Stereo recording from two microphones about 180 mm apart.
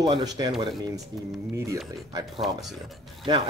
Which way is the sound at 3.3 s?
25° right (ahead or behind).